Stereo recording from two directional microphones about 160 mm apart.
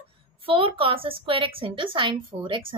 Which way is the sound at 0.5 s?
35° right (ahead or behind).